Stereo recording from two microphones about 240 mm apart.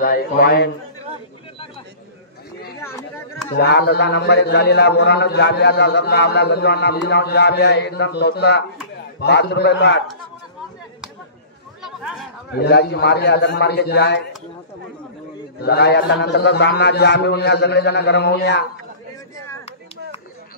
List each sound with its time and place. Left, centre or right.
0.0 s a man's voice: left
3.5 s a man's voice: left
11.8 s a sound: centre
12.5 s a man's voice: left
15.6 s a man's voice: left